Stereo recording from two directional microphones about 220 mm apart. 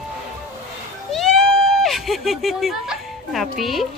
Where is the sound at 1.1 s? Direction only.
Centre (ahead or behind).